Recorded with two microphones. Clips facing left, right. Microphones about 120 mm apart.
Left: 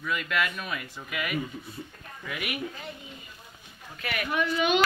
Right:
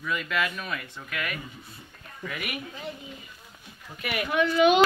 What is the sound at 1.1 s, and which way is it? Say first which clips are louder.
Speech: left 3 dB; 15° left (ahead or behind).